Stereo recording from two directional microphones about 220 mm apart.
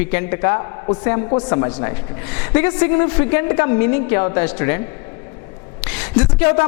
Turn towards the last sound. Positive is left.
turn(degrees=20)  # may be behind; listen again after turning